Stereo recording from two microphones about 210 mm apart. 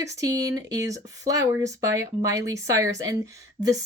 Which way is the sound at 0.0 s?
15° right (ahead or behind).